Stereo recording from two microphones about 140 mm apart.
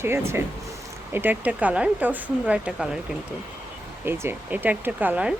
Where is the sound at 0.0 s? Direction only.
20° right (ahead or behind).